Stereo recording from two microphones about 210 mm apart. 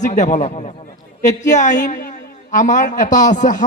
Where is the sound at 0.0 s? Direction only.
35° left (ahead or behind).